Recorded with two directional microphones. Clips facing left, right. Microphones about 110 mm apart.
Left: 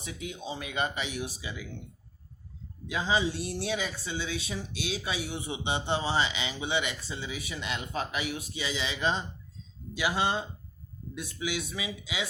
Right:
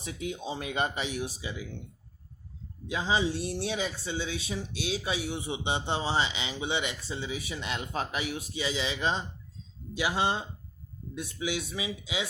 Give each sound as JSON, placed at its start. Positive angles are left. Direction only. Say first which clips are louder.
{"t": 0.0, "sound": "speech", "louder": "right 3 dB", "side_deg": -35}
{"t": 2.8, "sound": "speech", "louder": "even", "side_deg": -30}